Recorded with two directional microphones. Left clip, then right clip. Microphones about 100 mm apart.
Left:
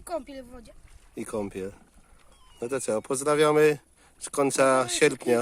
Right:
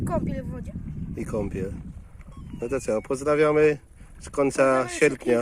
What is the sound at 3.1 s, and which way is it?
Speech, 45° left (ahead or behind).